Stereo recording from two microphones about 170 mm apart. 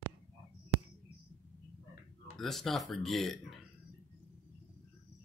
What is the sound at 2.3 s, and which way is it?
Speech, centre (ahead or behind).